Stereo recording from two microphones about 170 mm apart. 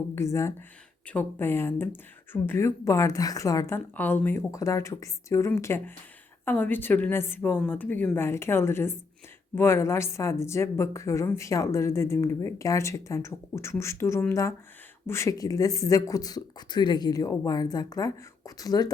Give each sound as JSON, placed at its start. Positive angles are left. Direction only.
{"t": 0.2, "sound": "a woman's voice", "side_deg": 15}